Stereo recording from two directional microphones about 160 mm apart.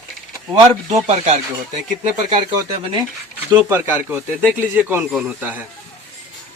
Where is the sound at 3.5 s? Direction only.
15° right (ahead or behind).